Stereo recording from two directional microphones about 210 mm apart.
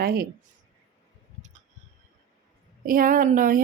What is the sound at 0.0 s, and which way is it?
Speech, 45° right (ahead or behind).